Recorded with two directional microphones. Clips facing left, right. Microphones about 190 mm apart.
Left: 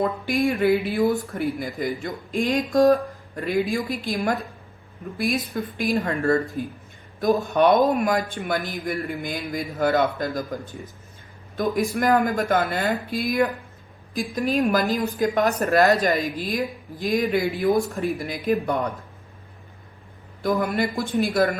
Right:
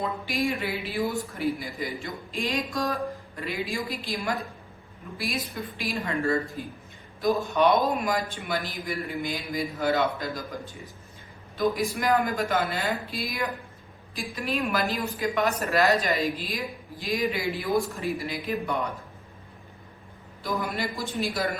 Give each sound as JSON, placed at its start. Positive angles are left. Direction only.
{"t": 0.0, "sound": "speech", "side_deg": 55}
{"t": 11.5, "sound": "speech", "side_deg": 50}
{"t": 14.2, "sound": "speech", "side_deg": 40}
{"t": 20.4, "sound": "a woman's voice", "side_deg": 55}